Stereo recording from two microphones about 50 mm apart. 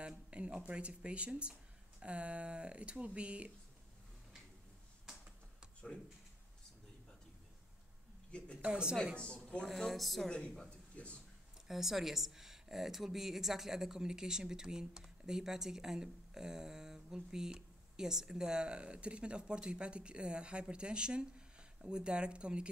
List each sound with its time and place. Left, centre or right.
0.0 s speech: right
5.1 s computer keyboard: centre
8.3 s speech: left
8.6 s speech: centre
9.1 s speech: left
9.8 s speech: centre
10.7 s a sound: left
11.6 s speech: centre